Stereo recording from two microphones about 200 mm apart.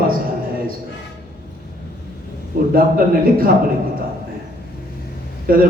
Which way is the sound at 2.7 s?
45° right (ahead or behind).